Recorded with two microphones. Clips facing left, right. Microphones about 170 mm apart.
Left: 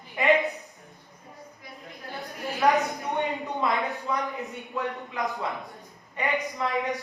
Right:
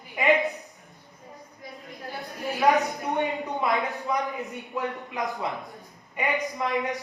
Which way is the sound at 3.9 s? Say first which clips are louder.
Right 2 dB; 15° right (ahead or behind).